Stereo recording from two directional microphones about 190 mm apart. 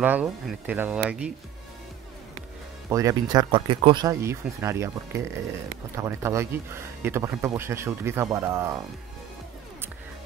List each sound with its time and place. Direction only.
0.0 s speech: 10° right (ahead or behind)
2.9 s speech: 15° right (ahead or behind)